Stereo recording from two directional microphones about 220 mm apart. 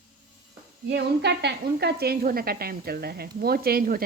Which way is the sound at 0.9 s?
50° right (ahead or behind).